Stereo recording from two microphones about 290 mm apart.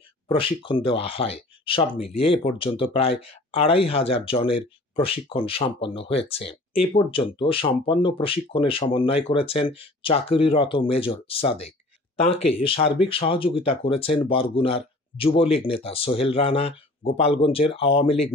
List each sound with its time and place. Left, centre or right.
0.3 s speech: centre
3.1 s speech: left
3.5 s speech: centre
12.5 s speech: centre